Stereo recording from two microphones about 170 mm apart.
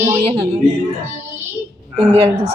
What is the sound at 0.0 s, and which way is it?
Speech, 40° right (ahead or behind).